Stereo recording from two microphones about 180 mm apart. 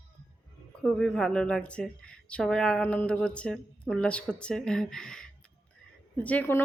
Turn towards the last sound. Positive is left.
turn(degrees=10)  # may be behind; listen again after turning